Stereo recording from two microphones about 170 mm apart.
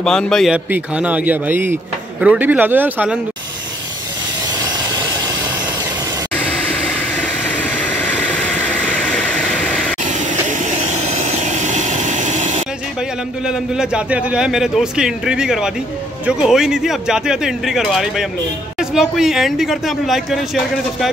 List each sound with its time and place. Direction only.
0.0 s a man's voice: 5° left (ahead or behind)
0.7 s speech: 10° right (ahead or behind)
4.6 s vehicle: 25° right (ahead or behind)
6.3 s vehicle: 10° left (ahead or behind)
10.0 s vehicle: 45° right (ahead or behind)
13.5 s a man's voice: 5° right (ahead or behind)